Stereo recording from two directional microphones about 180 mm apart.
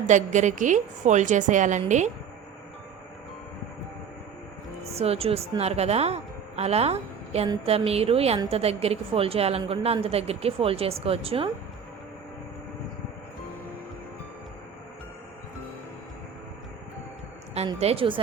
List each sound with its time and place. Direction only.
0.0 s a woman's voice: 40° right (ahead or behind)
4.9 s a woman's voice: 35° right (ahead or behind)
17.7 s a woman's voice: 35° right (ahead or behind)